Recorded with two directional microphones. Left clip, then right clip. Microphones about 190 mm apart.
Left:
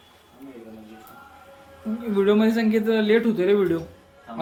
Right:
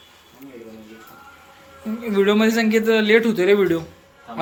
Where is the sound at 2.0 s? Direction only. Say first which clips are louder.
Right 3 dB; 5° right (ahead or behind).